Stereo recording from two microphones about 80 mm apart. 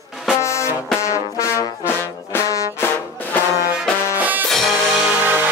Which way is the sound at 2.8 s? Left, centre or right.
Left.